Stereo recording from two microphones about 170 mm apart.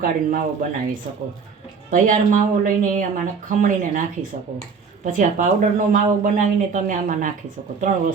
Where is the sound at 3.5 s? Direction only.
50° right (ahead or behind).